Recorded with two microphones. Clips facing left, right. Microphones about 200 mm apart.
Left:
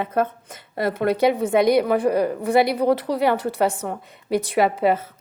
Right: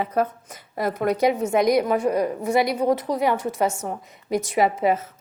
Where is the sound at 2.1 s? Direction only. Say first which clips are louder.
Left 2 dB; 65° left (ahead or behind).